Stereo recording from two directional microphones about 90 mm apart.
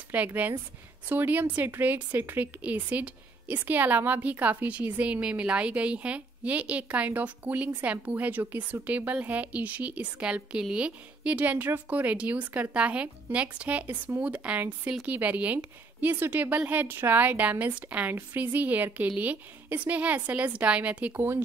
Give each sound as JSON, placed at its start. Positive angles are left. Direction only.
{"t": 0.1, "sound": "a woman's voice", "side_deg": -15}